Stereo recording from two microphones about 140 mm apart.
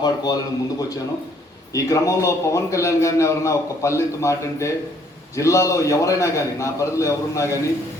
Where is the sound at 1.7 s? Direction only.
25° left (ahead or behind).